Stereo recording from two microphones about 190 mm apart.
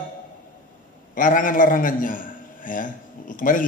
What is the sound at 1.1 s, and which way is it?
A man's voice, 45° left (ahead or behind).